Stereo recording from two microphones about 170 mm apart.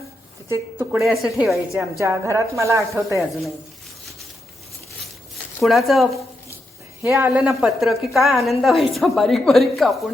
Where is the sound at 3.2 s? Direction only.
Centre (ahead or behind).